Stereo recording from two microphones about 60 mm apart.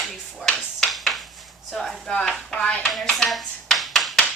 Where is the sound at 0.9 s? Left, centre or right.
Centre.